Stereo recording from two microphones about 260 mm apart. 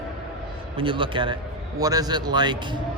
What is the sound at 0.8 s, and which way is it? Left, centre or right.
A man's voice, centre.